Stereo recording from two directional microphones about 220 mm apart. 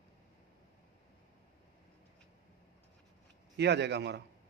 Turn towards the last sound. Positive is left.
turn(degrees=-50)  # may be behind; listen again after turning